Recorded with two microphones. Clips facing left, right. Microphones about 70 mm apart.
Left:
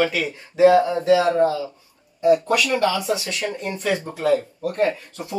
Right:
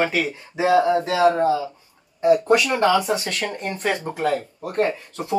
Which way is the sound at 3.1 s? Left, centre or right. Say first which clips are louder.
Even; right.